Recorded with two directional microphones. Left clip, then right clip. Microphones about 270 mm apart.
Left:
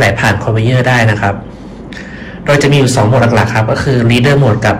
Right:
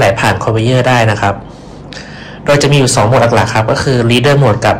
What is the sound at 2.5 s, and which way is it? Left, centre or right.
A man's voice, centre.